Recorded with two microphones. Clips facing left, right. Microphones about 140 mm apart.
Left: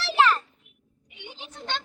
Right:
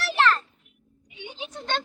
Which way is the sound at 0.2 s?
10° left (ahead or behind).